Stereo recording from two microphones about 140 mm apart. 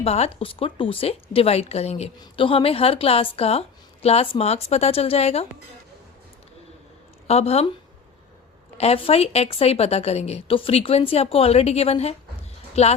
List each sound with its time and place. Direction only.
0.0 s a woman's voice: 50° left (ahead or behind)
7.3 s a woman's voice: 45° left (ahead or behind)
8.8 s a woman's voice: 45° left (ahead or behind)